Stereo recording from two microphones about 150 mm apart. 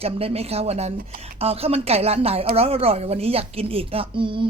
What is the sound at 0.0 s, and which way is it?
A woman's voice, 40° right (ahead or behind).